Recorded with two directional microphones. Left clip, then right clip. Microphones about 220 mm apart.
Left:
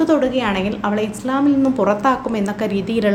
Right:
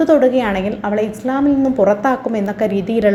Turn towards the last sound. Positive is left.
turn(degrees=-10)  # may be behind; listen again after turning